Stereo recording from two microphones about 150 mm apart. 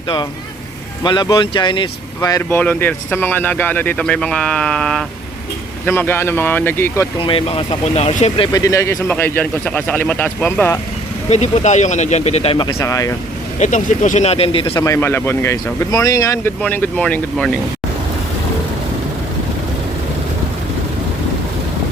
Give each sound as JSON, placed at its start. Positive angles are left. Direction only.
{"t": 1.0, "sound": "speech", "side_deg": 30}
{"t": 2.6, "sound": "speech", "side_deg": 10}
{"t": 7.2, "sound": "speech", "side_deg": 35}
{"t": 8.5, "sound": "speech", "side_deg": 20}
{"t": 11.3, "sound": "speech", "side_deg": 50}
{"t": 12.6, "sound": "speech", "side_deg": 25}
{"t": 13.6, "sound": "speech", "side_deg": 55}
{"t": 14.8, "sound": "speech", "side_deg": 20}